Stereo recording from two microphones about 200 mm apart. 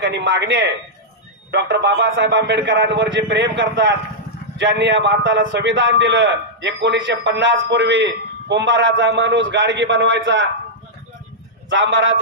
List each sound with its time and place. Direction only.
0.0 s a man's voice: 60° right (ahead or behind)
11.7 s a man's voice: 65° right (ahead or behind)